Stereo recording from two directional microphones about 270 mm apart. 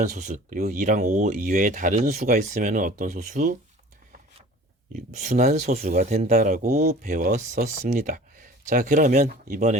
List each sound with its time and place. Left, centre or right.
0.2 s speech: right
4.9 s speech: right